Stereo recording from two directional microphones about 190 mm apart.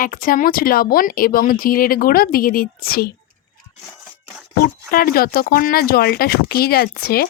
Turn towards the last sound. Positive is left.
turn(degrees=55)  # may be behind; listen again after turning